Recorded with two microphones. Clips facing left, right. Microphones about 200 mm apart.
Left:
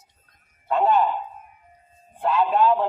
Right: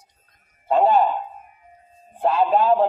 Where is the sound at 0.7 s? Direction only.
30° right (ahead or behind).